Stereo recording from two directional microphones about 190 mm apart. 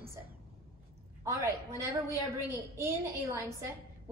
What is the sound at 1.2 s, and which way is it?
A woman's voice, 15° right (ahead or behind).